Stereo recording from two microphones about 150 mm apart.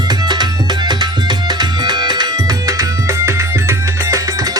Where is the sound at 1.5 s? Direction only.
30° right (ahead or behind).